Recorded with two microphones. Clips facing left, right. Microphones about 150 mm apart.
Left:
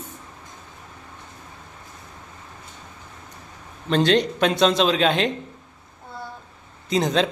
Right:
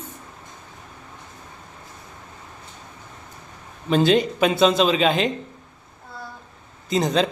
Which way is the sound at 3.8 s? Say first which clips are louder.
Right 1 dB; 5° right (ahead or behind).